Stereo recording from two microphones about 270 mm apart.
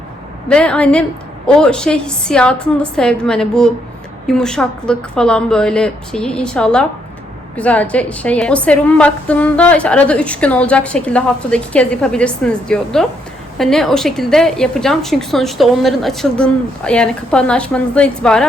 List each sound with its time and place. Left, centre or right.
0.4 s a woman's voice: centre